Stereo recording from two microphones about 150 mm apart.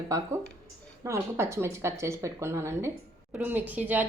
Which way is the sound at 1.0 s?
20° right (ahead or behind).